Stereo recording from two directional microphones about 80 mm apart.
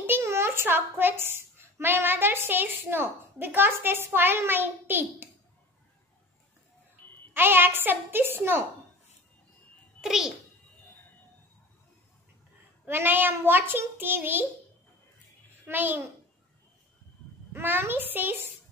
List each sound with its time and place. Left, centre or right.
0.0 s a woman's voice: right
7.3 s a child's voice: right
10.0 s a child's voice: centre
12.8 s a child's voice: right
15.6 s a child's voice: right
17.5 s a child's voice: right